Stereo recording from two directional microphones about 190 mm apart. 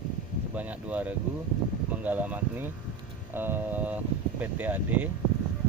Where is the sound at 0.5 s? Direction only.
10° right (ahead or behind).